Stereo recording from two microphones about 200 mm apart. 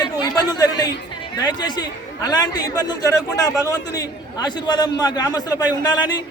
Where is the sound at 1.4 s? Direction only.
20° left (ahead or behind).